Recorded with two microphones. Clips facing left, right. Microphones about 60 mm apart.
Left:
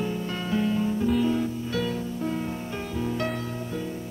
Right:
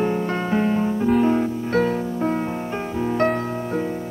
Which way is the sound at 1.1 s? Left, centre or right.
Right.